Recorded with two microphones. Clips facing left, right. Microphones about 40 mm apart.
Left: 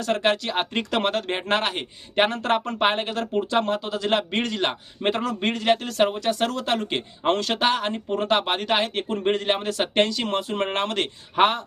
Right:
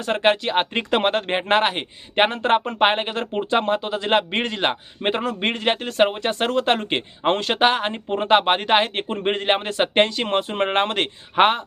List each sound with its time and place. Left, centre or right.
0.0 s speech: right